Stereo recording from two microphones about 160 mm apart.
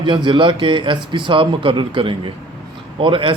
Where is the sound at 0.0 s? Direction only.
30° right (ahead or behind).